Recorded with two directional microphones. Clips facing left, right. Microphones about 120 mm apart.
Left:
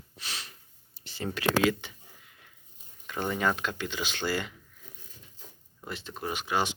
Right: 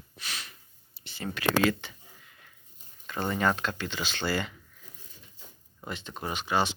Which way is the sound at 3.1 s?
10° left (ahead or behind).